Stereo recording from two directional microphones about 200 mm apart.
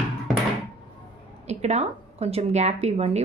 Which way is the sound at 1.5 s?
35° right (ahead or behind).